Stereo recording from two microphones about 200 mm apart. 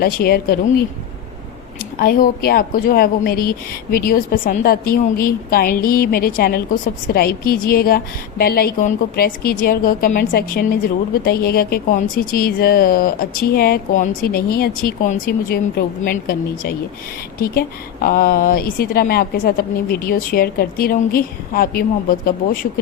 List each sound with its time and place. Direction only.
0.0 s a woman's voice: 50° left (ahead or behind)